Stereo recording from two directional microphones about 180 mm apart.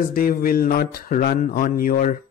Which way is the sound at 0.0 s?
50° left (ahead or behind).